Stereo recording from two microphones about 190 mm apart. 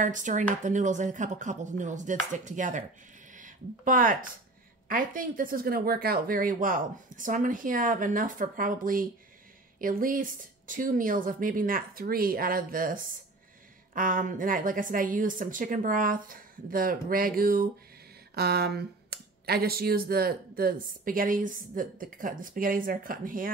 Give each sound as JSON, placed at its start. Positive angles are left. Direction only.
{"t": 0.0, "sound": "speech", "side_deg": -40}